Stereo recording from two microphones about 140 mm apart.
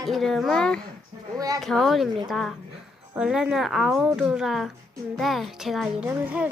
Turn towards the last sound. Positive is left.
turn(degrees=-10)  # may be behind; listen again after turning